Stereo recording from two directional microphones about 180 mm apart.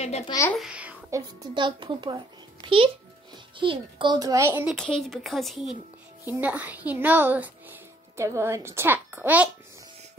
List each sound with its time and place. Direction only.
0.3 s speech: 15° left (ahead or behind)
0.6 s a sound: 5° right (ahead or behind)
1.1 s a child's voice: 25° right (ahead or behind)
4.7 s a woman's voice: 5° left (ahead or behind)